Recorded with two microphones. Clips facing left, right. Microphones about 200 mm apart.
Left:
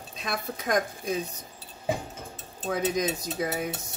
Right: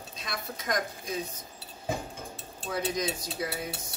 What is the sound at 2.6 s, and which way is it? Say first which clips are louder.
Speech: left 4 dB; 45° left (ahead or behind).